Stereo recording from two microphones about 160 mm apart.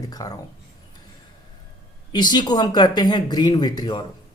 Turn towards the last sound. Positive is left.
turn(degrees=25)  # may be behind; listen again after turning